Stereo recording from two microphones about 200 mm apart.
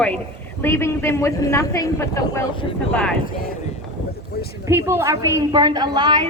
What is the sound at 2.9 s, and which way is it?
Speech, 5° left (ahead or behind).